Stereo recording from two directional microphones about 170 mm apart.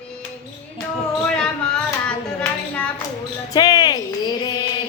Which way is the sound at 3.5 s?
25° left (ahead or behind).